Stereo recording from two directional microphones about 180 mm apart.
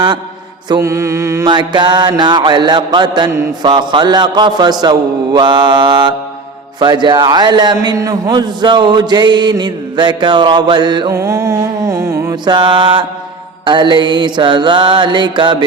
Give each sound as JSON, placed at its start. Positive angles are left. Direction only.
{"t": 0.7, "sound": "a man's voice", "side_deg": -15}